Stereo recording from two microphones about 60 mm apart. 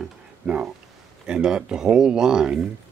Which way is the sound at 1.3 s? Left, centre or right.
Centre.